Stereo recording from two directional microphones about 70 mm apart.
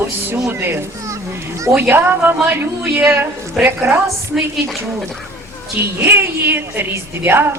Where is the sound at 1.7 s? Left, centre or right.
Right.